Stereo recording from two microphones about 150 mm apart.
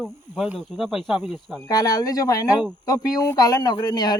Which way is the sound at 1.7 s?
25° left (ahead or behind).